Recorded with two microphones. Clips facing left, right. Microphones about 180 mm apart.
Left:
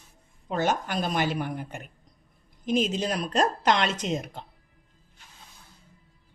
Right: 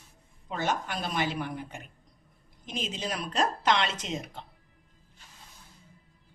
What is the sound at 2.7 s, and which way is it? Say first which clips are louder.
Speech: left 9 dB; 45° left (ahead or behind).